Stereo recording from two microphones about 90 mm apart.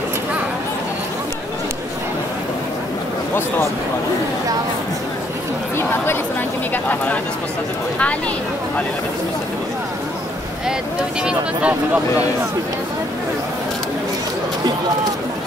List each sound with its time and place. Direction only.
6.7 s speech: 20° left (ahead or behind)
11.2 s speech: 15° right (ahead or behind)